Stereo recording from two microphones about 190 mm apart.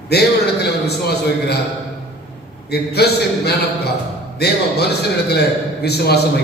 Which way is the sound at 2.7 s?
55° left (ahead or behind).